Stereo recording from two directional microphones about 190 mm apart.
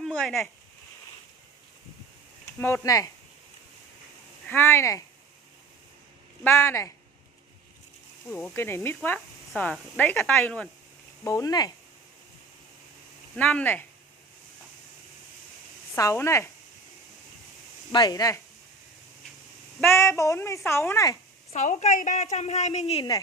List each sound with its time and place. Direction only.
0.0 s a sound: centre (ahead or behind)
2.6 s speech: 15° left (ahead or behind)
4.5 s speech: 15° left (ahead or behind)
6.4 s speech: 10° left (ahead or behind)
8.5 s speech: 10° left (ahead or behind)
13.4 s speech: 5° left (ahead or behind)
15.9 s speech: 15° left (ahead or behind)
17.9 s speech: 20° left (ahead or behind)
19.9 s speech: 15° left (ahead or behind)
21.5 s a woman's voice: 40° left (ahead or behind)